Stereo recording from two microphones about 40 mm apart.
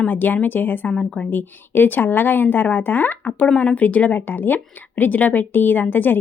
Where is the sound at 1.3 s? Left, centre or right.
Left.